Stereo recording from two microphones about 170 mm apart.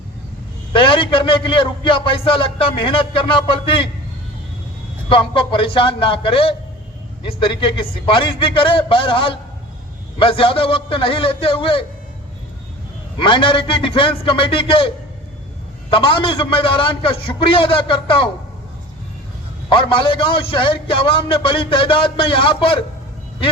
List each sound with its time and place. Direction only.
0.7 s a man's voice: 30° left (ahead or behind)
5.0 s a man's voice: 30° left (ahead or behind)
13.1 s a man's voice: 30° left (ahead or behind)
19.7 s a man's voice: 30° left (ahead or behind)